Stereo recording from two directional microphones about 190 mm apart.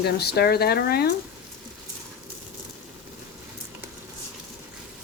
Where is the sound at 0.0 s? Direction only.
60° left (ahead or behind).